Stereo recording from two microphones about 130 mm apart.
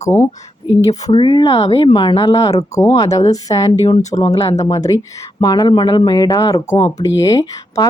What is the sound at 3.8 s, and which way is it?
Speech, 60° left (ahead or behind).